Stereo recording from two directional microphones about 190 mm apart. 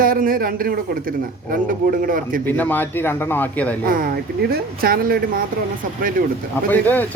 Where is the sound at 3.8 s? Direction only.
50° right (ahead or behind).